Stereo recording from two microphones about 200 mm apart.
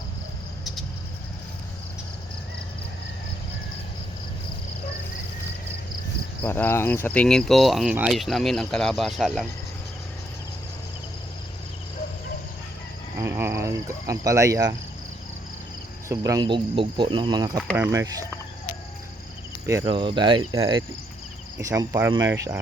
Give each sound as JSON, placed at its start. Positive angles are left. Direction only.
{"t": 6.4, "sound": "speech", "side_deg": 10}
{"t": 13.1, "sound": "cricket", "side_deg": -15}
{"t": 16.0, "sound": "speech", "side_deg": -15}
{"t": 19.8, "sound": "speech", "side_deg": -25}